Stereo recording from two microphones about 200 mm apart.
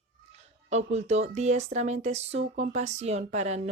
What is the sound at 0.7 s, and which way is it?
Speech, 35° right (ahead or behind).